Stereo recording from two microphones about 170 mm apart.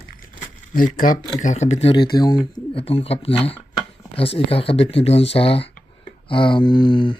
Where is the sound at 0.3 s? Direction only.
55° left (ahead or behind).